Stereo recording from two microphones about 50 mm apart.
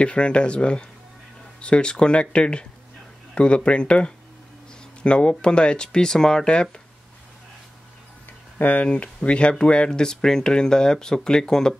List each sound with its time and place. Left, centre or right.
0.0 s speech: left
8.5 s speech: left
8.8 s speech: left